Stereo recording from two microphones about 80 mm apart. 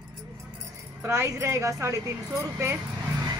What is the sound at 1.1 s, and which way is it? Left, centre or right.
Speech, right.